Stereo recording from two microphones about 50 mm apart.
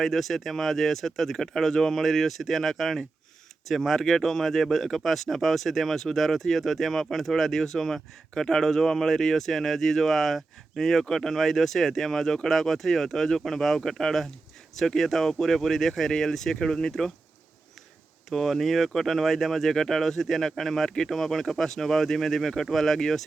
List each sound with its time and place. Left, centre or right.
0.0 s speech: centre
18.3 s speech: centre